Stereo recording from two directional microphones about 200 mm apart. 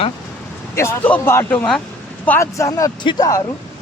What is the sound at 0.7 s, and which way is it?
Speech, 15° left (ahead or behind).